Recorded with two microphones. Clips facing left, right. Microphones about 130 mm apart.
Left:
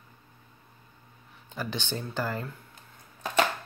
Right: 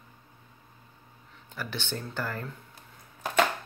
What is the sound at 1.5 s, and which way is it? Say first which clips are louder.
Speech: left 2 dB; 15° left (ahead or behind).